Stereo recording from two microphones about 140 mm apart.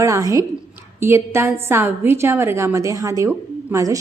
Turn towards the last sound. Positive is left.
turn(degrees=-20)  # may be behind; listen again after turning